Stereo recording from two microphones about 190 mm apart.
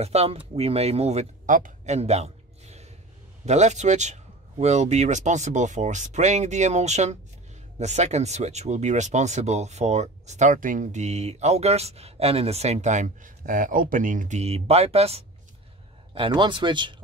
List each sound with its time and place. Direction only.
0.0 s a man's voice: 35° right (ahead or behind)